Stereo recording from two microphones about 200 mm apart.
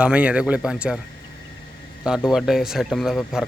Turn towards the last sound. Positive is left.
turn(degrees=0)  # may be behind; listen again after turning